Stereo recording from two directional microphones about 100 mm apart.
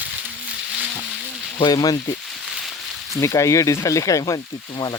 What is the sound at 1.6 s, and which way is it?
Speech, 45° left (ahead or behind).